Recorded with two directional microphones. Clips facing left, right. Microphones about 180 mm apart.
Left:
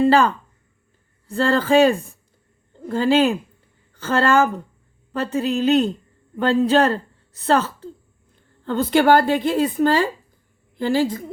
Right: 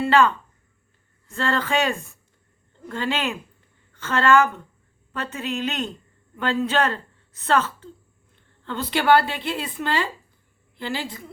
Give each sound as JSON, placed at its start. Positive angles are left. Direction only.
{"t": 0.0, "sound": "a woman's voice", "side_deg": 35}